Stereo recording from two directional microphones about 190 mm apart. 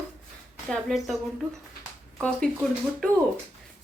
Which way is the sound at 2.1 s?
5° left (ahead or behind).